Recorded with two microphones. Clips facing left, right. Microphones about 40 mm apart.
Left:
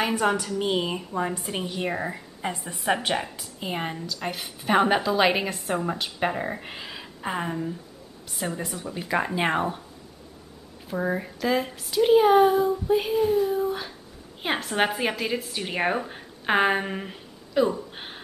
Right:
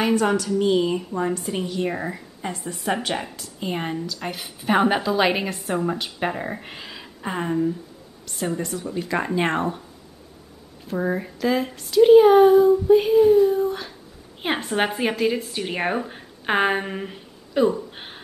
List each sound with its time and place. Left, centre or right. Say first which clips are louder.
0.0 s a woman's voice: right 3 dB; centre
0.6 s a woman's voice: right 6 dB; centre
1.9 s a woman's voice: right 1 dB; centre
10.9 s a woman's voice: right 2 dB; centre